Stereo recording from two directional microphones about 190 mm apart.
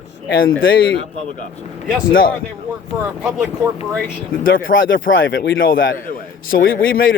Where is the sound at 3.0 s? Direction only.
5° right (ahead or behind).